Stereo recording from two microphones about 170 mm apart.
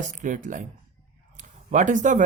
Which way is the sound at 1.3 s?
45° right (ahead or behind).